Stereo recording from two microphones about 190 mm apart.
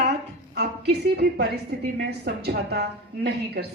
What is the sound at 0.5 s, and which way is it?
A woman's voice, 60° right (ahead or behind).